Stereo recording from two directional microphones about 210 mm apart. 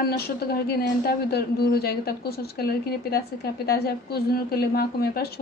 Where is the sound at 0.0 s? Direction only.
45° left (ahead or behind).